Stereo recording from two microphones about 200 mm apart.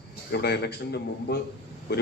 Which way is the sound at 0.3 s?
55° left (ahead or behind).